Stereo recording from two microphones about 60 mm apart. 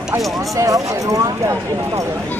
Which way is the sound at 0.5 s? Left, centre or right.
Right.